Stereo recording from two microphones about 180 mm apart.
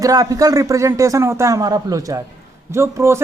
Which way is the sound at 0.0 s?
20° right (ahead or behind).